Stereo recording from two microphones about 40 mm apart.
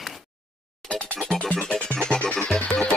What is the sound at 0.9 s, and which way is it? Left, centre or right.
Music, left.